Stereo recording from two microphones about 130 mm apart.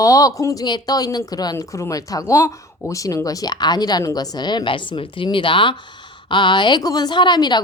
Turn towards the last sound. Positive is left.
turn(degrees=35)  # may be behind; listen again after turning